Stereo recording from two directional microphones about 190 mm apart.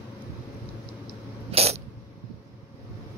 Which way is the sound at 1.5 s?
35° right (ahead or behind).